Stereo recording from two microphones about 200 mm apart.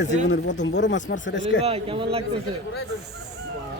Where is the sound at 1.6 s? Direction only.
30° right (ahead or behind).